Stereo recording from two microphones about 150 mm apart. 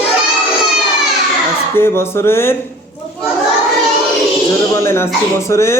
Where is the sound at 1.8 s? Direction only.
15° left (ahead or behind).